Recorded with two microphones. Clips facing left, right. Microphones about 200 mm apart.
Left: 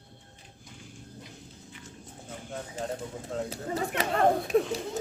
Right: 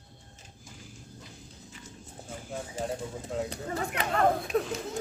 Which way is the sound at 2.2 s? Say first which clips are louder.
Right 1 dB; 10° right (ahead or behind).